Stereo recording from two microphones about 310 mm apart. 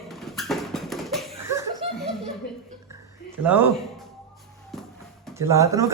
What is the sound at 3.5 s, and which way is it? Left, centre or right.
Speech, centre.